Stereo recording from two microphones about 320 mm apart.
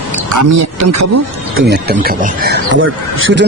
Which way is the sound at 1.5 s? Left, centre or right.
Right.